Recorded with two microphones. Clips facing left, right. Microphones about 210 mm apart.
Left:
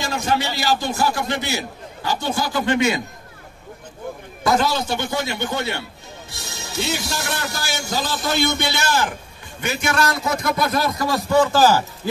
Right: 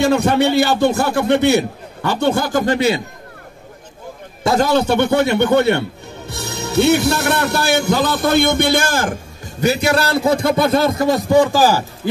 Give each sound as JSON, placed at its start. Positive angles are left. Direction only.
{"t": 0.0, "sound": "speech", "side_deg": -65}
{"t": 4.6, "sound": "speech", "side_deg": -60}